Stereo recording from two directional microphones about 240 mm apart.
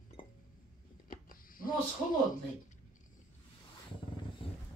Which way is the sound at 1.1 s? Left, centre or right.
Left.